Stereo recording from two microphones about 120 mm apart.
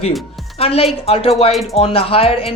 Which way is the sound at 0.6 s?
55° left (ahead or behind).